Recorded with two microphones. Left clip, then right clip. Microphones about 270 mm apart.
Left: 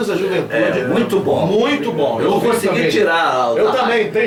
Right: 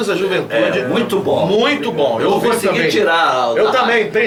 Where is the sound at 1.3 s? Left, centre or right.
Right.